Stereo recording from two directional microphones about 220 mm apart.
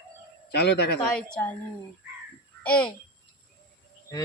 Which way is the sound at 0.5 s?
50° left (ahead or behind).